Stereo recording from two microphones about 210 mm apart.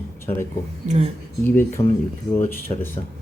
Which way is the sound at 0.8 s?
30° right (ahead or behind).